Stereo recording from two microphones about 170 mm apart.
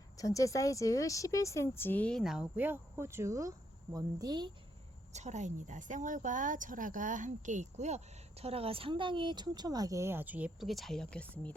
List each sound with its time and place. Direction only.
0.2 s a woman's voice: 20° left (ahead or behind); by 4.5 s 25° right (ahead or behind)
5.1 s a woman's voice: 45° right (ahead or behind); by 11.5 s 10° left (ahead or behind)